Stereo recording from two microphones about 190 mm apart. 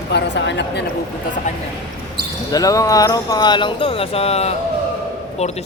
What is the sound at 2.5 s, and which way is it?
Speech, 20° left (ahead or behind).